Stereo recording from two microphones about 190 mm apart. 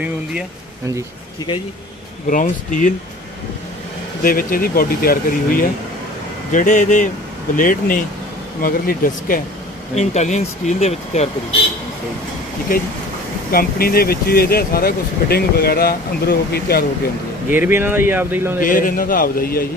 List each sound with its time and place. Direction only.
0.0 s speech: 5° right (ahead or behind)
2.2 s speech: 45° left (ahead or behind)
4.2 s speech: 50° left (ahead or behind)
9.9 s speech: 35° left (ahead or behind)
13.5 s speech: 50° left (ahead or behind)
17.5 s speech: 10° right (ahead or behind)
18.6 s speech: 45° left (ahead or behind)